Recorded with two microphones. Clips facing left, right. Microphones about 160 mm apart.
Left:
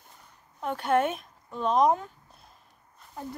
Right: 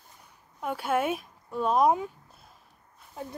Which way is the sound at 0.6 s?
5° right (ahead or behind).